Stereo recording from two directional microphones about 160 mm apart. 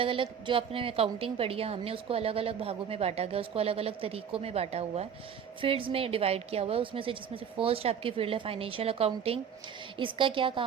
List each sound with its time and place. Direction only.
0.0 s a woman's voice: 30° right (ahead or behind)